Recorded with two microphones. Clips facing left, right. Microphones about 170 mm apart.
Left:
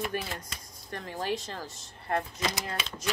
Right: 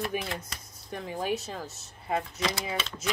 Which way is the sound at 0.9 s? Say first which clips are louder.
Right 2 dB; 5° right (ahead or behind).